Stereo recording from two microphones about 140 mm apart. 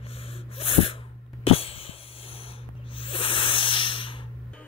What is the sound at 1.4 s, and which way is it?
Wheeze, 45° left (ahead or behind).